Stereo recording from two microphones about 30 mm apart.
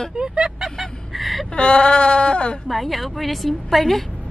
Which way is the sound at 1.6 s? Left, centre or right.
Left.